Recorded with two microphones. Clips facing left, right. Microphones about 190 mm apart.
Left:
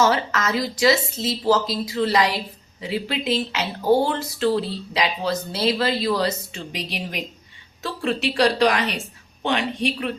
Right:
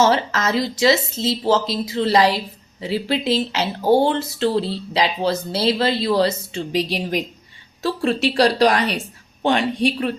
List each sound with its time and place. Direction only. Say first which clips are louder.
0.0 s a woman's voice: right 3 dB; 30° right (ahead or behind)